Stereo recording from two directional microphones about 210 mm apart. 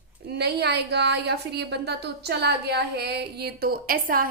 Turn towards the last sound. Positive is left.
turn(degrees=-45)  # may be behind; listen again after turning